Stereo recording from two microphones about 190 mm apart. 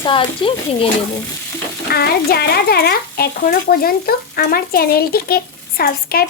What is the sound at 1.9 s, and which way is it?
Speech, 55° left (ahead or behind).